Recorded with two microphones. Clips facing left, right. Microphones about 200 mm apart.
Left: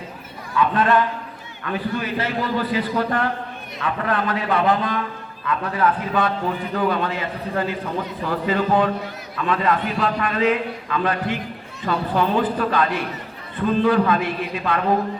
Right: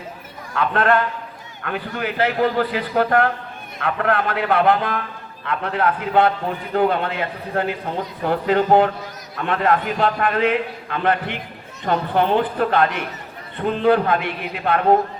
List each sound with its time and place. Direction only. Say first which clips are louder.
0.5 s a man's voice: even; 65° right (ahead or behind)